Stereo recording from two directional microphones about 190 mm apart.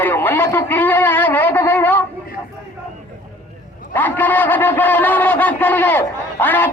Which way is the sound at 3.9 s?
10° left (ahead or behind).